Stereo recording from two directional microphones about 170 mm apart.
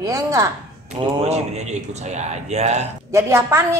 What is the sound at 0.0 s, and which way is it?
Speech, 20° right (ahead or behind).